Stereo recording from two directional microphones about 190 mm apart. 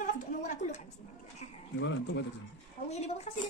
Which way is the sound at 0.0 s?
40° left (ahead or behind).